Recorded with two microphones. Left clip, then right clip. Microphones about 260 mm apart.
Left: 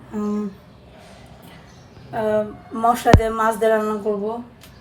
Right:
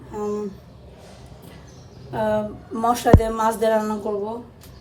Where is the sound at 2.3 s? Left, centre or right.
Right.